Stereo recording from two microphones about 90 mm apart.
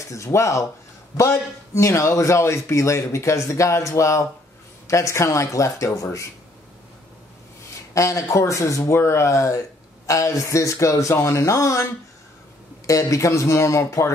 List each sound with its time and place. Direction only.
0.1 s a man's voice: 35° left (ahead or behind)
7.9 s a man's voice: 35° left (ahead or behind)